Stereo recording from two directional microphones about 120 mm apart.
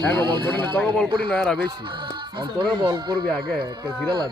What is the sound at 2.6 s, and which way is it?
Speech, 40° right (ahead or behind).